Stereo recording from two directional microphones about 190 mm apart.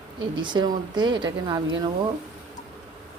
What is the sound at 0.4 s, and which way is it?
A woman's voice, 25° right (ahead or behind).